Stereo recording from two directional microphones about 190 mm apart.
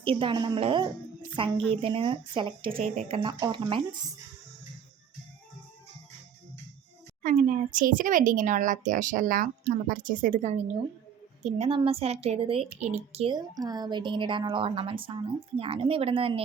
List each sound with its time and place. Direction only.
0.0 s a woman's voice: 25° right (ahead or behind)
7.2 s a woman's voice: 40° right (ahead or behind)
13.3 s a woman's voice: 20° right (ahead or behind)